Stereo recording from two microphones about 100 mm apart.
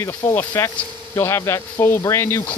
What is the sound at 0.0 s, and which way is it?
Speech, 25° left (ahead or behind).